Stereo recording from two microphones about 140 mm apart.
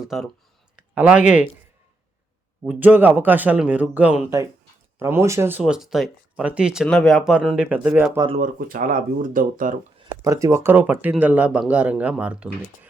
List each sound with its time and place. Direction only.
0.0 s speech: centre (ahead or behind)
2.6 s speech: 10° right (ahead or behind)
8.4 s speech: 85° right
10.2 s speech: 20° right (ahead or behind)